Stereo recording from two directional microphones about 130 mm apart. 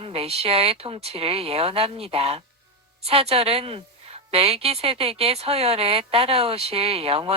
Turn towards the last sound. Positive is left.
turn(degrees=-50)  # may be behind; listen again after turning